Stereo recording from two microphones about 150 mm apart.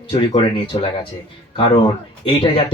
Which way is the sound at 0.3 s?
35° left (ahead or behind).